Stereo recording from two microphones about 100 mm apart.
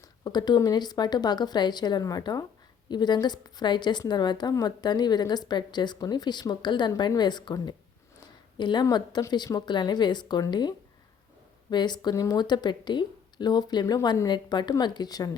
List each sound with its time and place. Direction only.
0.3 s speech: 45° left (ahead or behind)
12.1 s a woman's voice: 35° left (ahead or behind)
12.4 s speech: 45° left (ahead or behind)